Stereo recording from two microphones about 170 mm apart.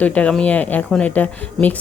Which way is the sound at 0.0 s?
10° left (ahead or behind).